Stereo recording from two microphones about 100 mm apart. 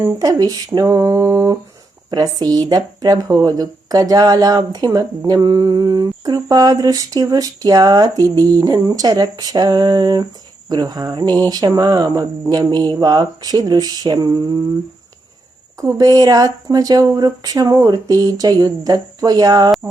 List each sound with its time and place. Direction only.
0.0 s speech: 35° right (ahead or behind)
15.8 s speech: 35° right (ahead or behind)